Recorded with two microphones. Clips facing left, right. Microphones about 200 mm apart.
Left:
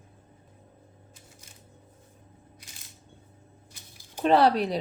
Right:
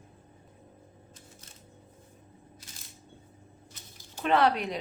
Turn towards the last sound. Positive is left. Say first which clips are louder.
# left 4 dB
turn(degrees=35)  # may be behind; listen again after turning